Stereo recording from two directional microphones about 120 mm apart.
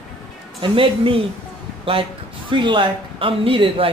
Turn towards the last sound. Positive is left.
turn(degrees=-50)  # may be behind; listen again after turning